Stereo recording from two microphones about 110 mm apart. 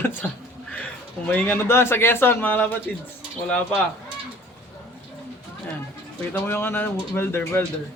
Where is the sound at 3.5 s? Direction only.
10° left (ahead or behind).